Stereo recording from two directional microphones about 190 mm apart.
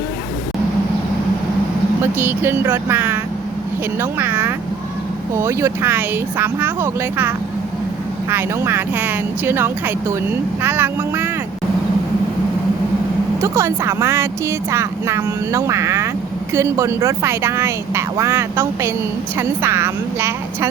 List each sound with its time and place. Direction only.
2.0 s speech: 10° right (ahead or behind)
4.2 s vehicle: 10° right (ahead or behind)
5.3 s speech: 15° right (ahead or behind)
13.4 s speech: 15° right (ahead or behind)